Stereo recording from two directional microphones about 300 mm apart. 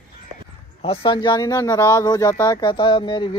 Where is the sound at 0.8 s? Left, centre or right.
Centre.